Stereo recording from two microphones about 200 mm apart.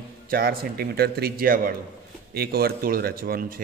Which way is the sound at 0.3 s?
50° right (ahead or behind).